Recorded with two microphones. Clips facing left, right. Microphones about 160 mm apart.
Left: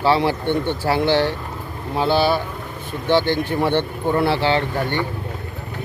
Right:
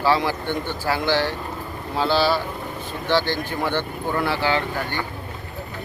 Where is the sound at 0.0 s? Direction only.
25° left (ahead or behind).